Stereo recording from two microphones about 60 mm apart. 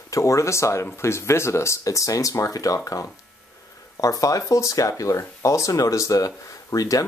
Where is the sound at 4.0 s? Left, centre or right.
Left.